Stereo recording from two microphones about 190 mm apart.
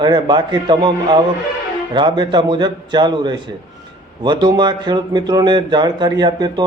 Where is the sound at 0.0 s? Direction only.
25° right (ahead or behind).